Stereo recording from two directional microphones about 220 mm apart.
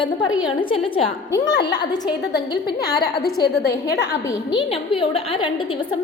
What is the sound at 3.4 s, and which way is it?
A woman's voice, 50° left (ahead or behind).